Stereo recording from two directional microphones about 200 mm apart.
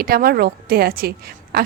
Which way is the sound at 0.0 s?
50° right (ahead or behind).